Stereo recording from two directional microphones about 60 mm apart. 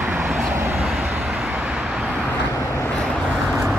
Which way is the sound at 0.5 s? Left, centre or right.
Right.